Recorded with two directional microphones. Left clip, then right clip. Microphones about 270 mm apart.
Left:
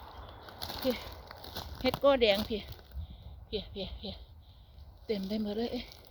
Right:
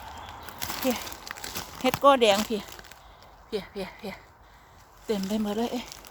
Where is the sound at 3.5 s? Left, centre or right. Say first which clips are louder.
Right 5 dB; right.